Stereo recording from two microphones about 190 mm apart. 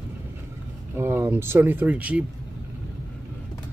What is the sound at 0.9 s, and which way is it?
Speech, 10° right (ahead or behind).